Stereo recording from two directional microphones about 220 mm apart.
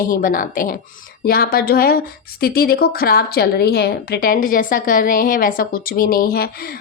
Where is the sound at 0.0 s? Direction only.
40° left (ahead or behind).